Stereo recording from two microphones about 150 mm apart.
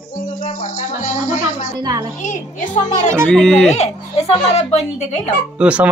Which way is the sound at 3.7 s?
45° left (ahead or behind).